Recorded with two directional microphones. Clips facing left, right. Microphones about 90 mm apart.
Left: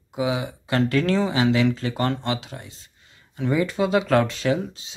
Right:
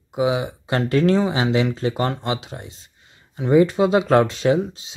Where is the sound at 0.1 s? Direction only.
25° right (ahead or behind).